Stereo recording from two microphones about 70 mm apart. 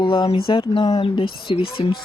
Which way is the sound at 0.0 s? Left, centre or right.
Left.